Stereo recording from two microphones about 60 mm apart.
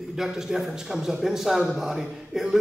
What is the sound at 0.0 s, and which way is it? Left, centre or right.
A man's voice, centre.